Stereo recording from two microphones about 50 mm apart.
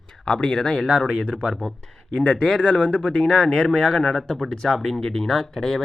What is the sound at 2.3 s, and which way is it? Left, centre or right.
Speech, centre.